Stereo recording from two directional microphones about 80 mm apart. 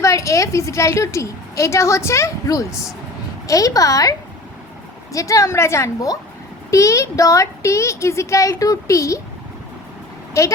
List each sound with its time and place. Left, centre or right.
0.0 s a woman's voice: left
5.1 s a woman's voice: left
10.4 s a woman's voice: left